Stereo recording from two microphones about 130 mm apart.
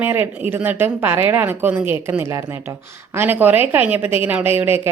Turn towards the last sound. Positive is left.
turn(degrees=-15)  # may be behind; listen again after turning